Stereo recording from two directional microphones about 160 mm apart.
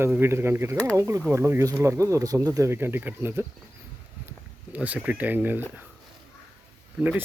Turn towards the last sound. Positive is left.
turn(degrees=-10)  # may be behind; listen again after turning